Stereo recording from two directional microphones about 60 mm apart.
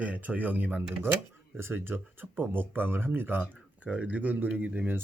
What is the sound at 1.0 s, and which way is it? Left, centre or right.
Speech, right.